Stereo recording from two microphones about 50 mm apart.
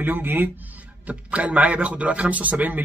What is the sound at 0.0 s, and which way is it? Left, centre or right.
Speech, right.